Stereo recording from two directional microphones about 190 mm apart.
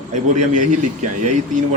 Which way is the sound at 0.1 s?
40° right (ahead or behind).